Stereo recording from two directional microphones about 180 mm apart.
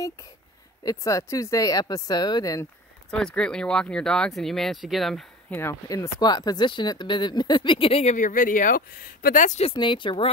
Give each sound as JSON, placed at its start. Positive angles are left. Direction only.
{"t": 0.8, "sound": "speech", "side_deg": 15}
{"t": 3.1, "sound": "speech", "side_deg": 5}
{"t": 5.6, "sound": "speech", "side_deg": 15}